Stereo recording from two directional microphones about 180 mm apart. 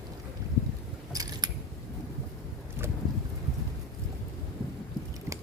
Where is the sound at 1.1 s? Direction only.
20° right (ahead or behind).